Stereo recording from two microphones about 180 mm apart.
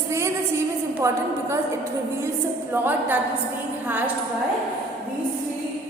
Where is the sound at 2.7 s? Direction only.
10° right (ahead or behind).